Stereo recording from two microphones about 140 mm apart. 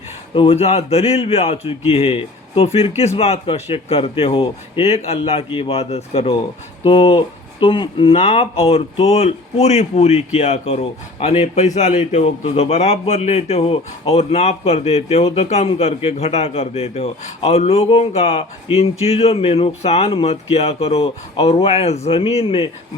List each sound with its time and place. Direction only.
0.3 s a man's voice: 45° left (ahead or behind)